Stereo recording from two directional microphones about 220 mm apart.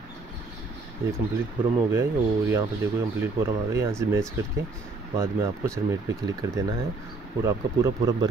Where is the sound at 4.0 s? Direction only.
10° right (ahead or behind).